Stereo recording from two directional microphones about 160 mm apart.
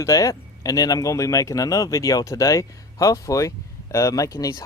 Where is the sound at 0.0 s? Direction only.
20° left (ahead or behind).